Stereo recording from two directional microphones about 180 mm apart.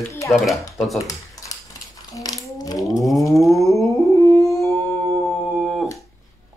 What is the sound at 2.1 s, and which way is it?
Ratchet, 20° left (ahead or behind).